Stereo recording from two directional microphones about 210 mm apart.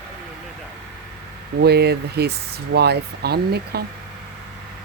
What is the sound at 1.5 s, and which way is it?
Speech, 50° right (ahead or behind).